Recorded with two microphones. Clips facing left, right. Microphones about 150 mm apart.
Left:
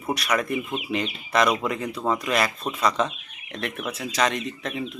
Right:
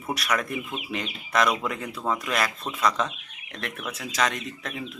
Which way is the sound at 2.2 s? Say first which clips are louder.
Left 4 dB; centre (ahead or behind).